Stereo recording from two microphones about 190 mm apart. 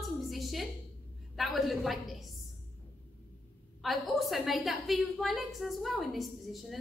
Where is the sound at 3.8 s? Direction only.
Centre (ahead or behind).